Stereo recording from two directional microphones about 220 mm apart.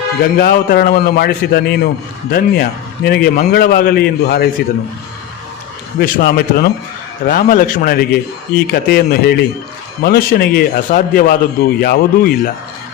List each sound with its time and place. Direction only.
0.2 s a man's voice: 50° left (ahead or behind)
6.0 s a man's voice: 45° left (ahead or behind)